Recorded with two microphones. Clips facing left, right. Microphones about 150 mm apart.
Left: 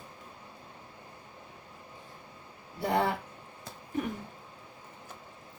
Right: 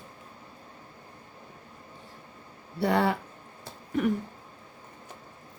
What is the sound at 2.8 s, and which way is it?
Speech, 75° right (ahead or behind).